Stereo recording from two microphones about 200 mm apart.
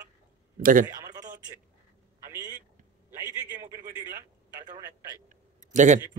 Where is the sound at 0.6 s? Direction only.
45° right (ahead or behind).